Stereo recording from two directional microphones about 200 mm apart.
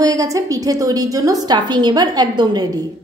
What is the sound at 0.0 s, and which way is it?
A woman's voice, 15° right (ahead or behind).